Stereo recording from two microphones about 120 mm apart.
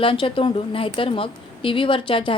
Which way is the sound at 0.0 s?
50° left (ahead or behind).